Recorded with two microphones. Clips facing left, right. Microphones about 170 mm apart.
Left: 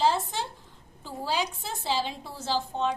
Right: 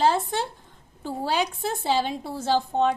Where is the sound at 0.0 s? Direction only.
60° right (ahead or behind).